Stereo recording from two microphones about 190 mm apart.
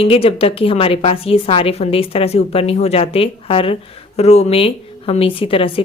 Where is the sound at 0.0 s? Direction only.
30° left (ahead or behind).